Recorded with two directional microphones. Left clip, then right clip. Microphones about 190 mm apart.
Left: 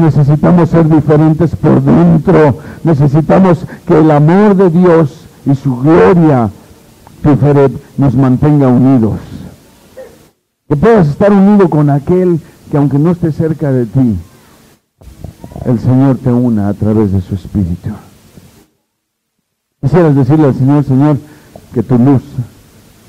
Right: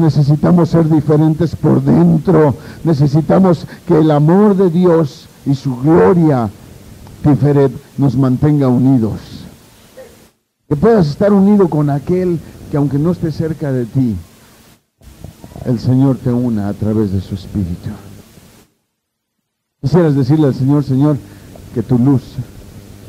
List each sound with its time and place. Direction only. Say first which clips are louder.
0.0 s speech: left 4 dB; 25° right (ahead or behind)
10.0 s a sound: left 6 dB; 25° right (ahead or behind)
10.7 s speech: left 4 dB; 25° right (ahead or behind)
15.5 s speech: left 4 dB; 25° right (ahead or behind)
19.9 s speech: left 4 dB; 25° right (ahead or behind)